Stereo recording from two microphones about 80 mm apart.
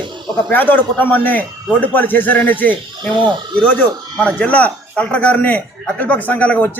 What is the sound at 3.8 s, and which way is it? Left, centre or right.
Speech, centre.